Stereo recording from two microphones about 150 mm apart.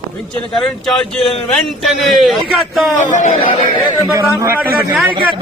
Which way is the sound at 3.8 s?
30° left (ahead or behind).